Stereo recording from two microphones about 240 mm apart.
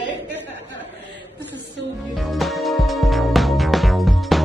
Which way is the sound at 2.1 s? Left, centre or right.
Centre.